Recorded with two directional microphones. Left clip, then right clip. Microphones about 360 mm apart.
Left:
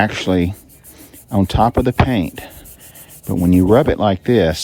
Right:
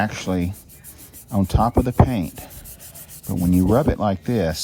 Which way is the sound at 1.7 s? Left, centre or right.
Right.